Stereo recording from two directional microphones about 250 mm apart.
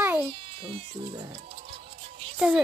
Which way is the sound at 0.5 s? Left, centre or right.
Right.